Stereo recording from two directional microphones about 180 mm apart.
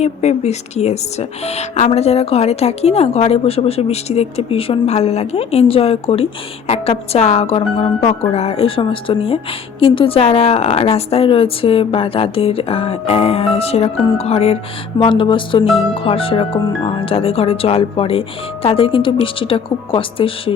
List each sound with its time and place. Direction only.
0.0 s speech: 40° left (ahead or behind)